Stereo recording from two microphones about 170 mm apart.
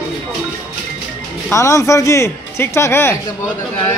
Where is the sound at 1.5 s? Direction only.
15° left (ahead or behind).